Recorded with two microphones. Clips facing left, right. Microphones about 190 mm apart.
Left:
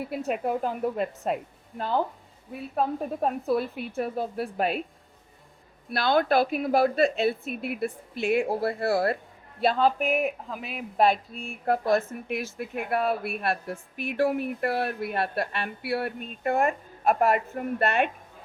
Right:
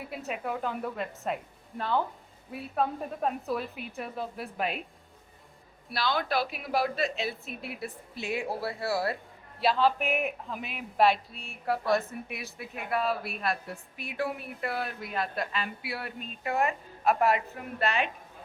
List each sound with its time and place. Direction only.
0.1 s speech: centre (ahead or behind)
0.4 s a woman's voice: 40° left (ahead or behind)
2.7 s speech: centre (ahead or behind)
4.0 s speech: 35° left (ahead or behind)
5.9 s a woman's voice: 50° left (ahead or behind); by 10.8 s 35° left (ahead or behind)
11.0 s a woman's voice: 45° left (ahead or behind)
14.8 s speech: 60° left (ahead or behind)